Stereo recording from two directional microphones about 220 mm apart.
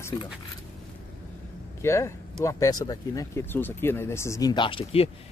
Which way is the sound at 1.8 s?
10° left (ahead or behind).